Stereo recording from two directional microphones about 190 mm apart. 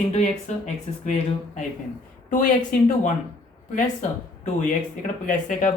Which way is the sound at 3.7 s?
40° left (ahead or behind).